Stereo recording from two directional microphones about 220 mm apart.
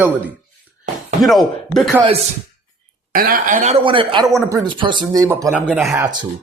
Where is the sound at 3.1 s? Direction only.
40° right (ahead or behind); by 6.3 s 15° right (ahead or behind).